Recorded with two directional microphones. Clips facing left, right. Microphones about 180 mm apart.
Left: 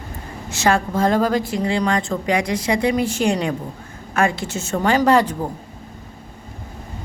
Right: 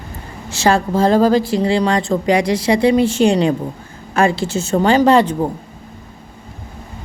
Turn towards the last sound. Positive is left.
turn(degrees=-25)  # may be behind; listen again after turning